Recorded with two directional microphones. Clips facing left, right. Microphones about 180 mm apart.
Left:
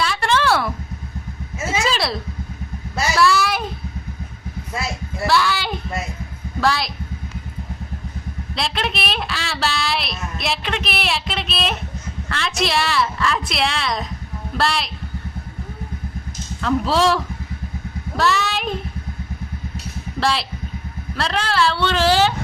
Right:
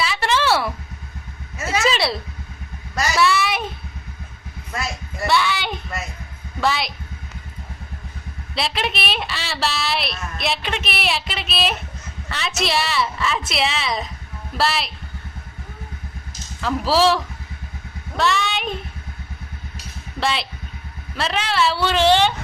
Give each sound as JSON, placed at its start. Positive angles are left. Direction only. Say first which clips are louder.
{"t": 0.0, "sound": "a sound", "louder": "left 1 dB", "side_deg": -5}
{"t": 1.5, "sound": "vehicle", "louder": "even", "side_deg": 25}
{"t": 1.8, "sound": "a sound", "louder": "right 2 dB", "side_deg": 0}
{"t": 3.2, "sound": "a sound", "louder": "left 2 dB", "side_deg": 0}
{"t": 5.2, "sound": "child singing", "louder": "left 1 dB", "side_deg": 0}
{"t": 6.6, "sound": "a woman's voice", "louder": "left 1 dB", "side_deg": 0}
{"t": 8.5, "sound": "a woman's voice", "louder": "even", "side_deg": 0}
{"t": 16.6, "sound": "a woman's voice", "louder": "even", "side_deg": -5}
{"t": 20.1, "sound": "a woman's voice", "louder": "left 2 dB", "side_deg": 0}